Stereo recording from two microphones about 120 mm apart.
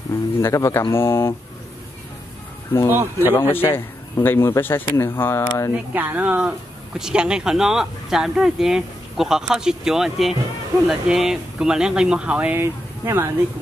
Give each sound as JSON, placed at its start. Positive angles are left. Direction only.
{"t": 0.4, "sound": "speech", "side_deg": 25}
{"t": 2.9, "sound": "speech", "side_deg": -15}
{"t": 3.3, "sound": "speech", "side_deg": 20}
{"t": 5.7, "sound": "speech", "side_deg": -10}